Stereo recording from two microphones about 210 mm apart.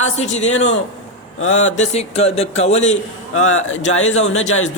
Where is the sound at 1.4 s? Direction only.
70° left (ahead or behind).